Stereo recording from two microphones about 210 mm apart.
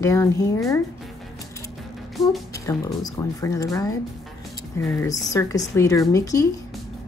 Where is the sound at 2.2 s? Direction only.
Centre (ahead or behind).